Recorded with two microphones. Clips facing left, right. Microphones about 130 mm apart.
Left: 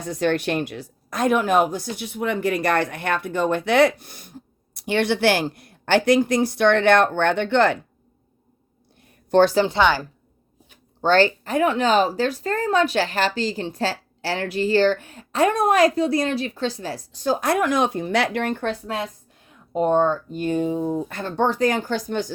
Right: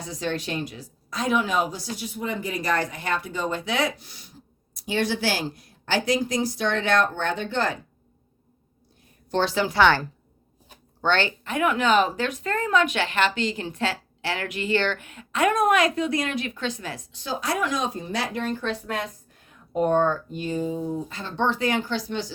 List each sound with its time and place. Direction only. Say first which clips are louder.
0.0 s a woman's voice: left 7 dB; 60° left (ahead or behind)
9.3 s speech: left 8 dB; 45° left (ahead or behind)
9.6 s speech: even; 20° left (ahead or behind)
11.0 s speech: left 6 dB; 40° left (ahead or behind); by 18.8 s 55° left (ahead or behind)
19.7 s speech: left 2 dB; 25° left (ahead or behind)
20.3 s speech: left 5 dB; 55° left (ahead or behind)